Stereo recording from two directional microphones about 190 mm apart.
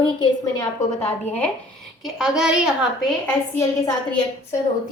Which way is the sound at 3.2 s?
15° left (ahead or behind).